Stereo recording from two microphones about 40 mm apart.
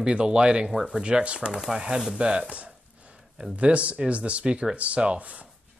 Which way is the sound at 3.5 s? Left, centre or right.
Right.